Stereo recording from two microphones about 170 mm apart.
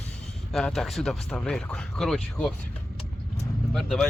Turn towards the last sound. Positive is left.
turn(degrees=0)  # may be behind; listen again after turning